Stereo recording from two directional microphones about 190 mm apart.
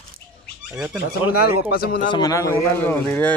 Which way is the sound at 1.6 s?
55° left (ahead or behind).